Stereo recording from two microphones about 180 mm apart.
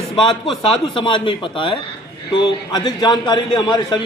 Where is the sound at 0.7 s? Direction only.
25° left (ahead or behind).